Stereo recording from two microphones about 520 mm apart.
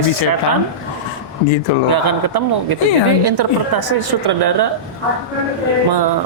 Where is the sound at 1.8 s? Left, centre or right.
Right.